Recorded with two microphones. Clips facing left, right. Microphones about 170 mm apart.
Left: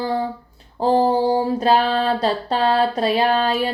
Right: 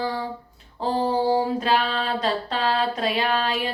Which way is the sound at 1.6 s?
35° left (ahead or behind).